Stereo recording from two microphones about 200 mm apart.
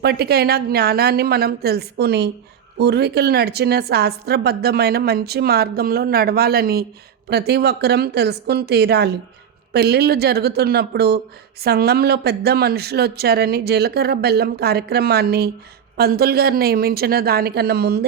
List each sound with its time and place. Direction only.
0.0 s a woman's voice: 55° right (ahead or behind)